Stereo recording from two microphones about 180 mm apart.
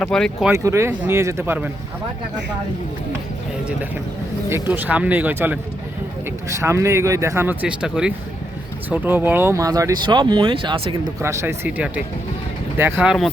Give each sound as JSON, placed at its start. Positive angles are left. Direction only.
{"t": 0.0, "sound": "speech", "side_deg": 5}
{"t": 0.5, "sound": "speech", "side_deg": -15}
{"t": 4.7, "sound": "speech", "side_deg": -10}
{"t": 11.2, "sound": "speech", "side_deg": -15}